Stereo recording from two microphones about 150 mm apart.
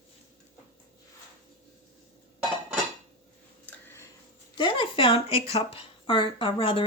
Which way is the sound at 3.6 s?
15° left (ahead or behind).